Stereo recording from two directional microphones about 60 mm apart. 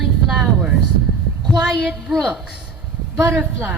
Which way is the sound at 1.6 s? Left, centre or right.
Centre.